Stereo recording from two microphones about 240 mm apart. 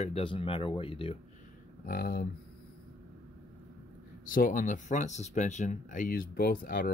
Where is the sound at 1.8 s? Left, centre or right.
Left.